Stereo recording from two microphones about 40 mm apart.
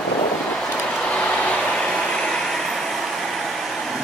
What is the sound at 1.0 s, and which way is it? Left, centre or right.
Vehicle, left.